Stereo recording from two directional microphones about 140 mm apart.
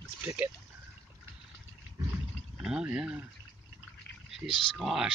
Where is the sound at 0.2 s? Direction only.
10° right (ahead or behind).